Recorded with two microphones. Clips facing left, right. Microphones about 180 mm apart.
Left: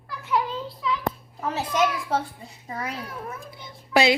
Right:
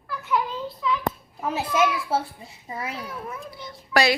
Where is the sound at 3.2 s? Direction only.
20° left (ahead or behind).